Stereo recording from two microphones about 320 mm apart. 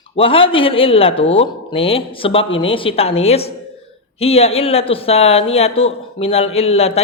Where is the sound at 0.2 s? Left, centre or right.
Centre.